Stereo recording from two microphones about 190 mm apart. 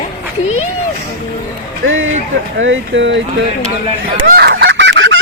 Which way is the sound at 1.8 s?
90° right.